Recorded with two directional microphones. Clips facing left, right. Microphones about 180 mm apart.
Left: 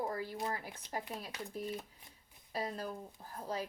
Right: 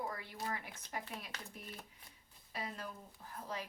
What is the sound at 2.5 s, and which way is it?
Speech, 35° left (ahead or behind).